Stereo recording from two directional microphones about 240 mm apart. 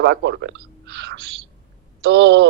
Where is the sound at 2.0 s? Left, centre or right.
Right.